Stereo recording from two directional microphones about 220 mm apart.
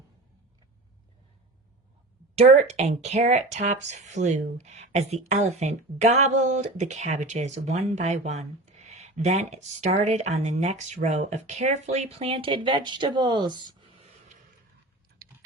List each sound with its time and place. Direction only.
2.4 s speech: 30° right (ahead or behind)